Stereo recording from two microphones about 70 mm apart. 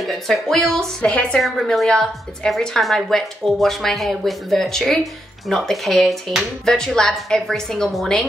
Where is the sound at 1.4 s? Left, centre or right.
Centre.